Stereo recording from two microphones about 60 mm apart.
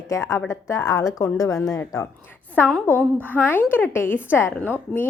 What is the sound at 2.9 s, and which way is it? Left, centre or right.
A woman's voice, left.